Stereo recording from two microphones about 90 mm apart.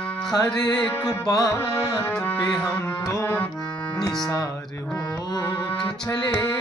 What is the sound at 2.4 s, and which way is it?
Music, 10° left (ahead or behind).